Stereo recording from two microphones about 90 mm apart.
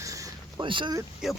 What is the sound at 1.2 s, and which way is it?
Speech, 5° right (ahead or behind).